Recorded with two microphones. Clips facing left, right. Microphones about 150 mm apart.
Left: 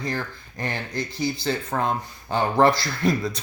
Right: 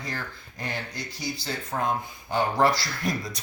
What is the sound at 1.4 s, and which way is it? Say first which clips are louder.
Speech: left 1 dB; 60° left (ahead or behind).